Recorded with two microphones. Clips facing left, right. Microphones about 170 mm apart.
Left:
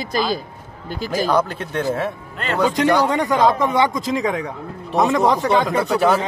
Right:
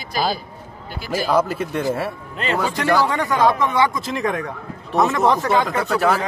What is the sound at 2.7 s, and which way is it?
A man's voice, 20° left (ahead or behind).